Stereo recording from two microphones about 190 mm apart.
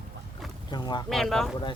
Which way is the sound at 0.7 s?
20° left (ahead or behind).